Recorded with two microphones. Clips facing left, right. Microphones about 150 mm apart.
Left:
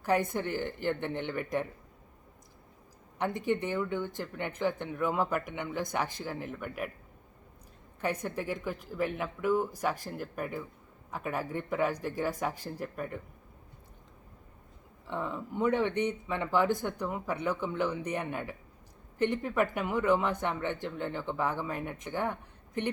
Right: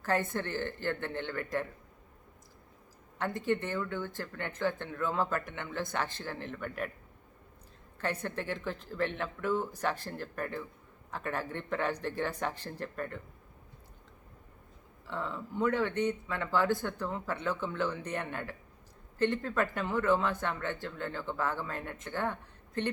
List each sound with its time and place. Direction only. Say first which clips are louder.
0.0 s speech: left 3 dB; 15° left (ahead or behind)
3.2 s speech: left 1 dB; 15° left (ahead or behind)
8.0 s speech: left 2 dB; 10° left (ahead or behind)
15.0 s speech: left 2 dB; 15° left (ahead or behind)